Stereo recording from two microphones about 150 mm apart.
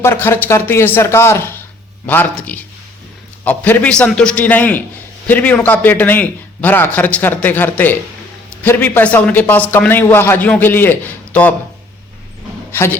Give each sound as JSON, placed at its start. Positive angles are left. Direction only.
{"t": 0.0, "sound": "a man's voice", "side_deg": 15}
{"t": 12.7, "sound": "a man's voice", "side_deg": 15}